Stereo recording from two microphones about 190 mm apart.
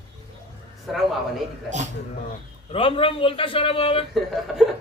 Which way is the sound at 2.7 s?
30° left (ahead or behind).